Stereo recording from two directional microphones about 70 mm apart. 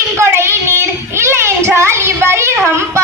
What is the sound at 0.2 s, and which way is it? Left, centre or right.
Child singing, right.